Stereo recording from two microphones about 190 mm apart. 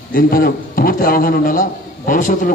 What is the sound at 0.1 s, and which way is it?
A man's voice, 50° left (ahead or behind).